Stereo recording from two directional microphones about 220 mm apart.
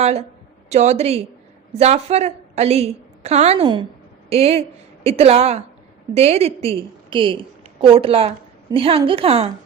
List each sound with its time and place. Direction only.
0.0 s a woman's voice: 30° right (ahead or behind)